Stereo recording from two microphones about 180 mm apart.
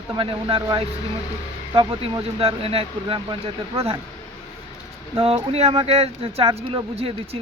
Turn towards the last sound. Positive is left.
turn(degrees=-35)  # may be behind; listen again after turning